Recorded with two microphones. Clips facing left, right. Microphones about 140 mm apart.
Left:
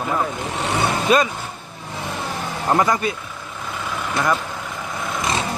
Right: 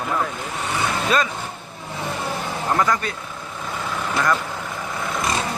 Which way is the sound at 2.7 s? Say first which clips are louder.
Left 3 dB; 20° left (ahead or behind).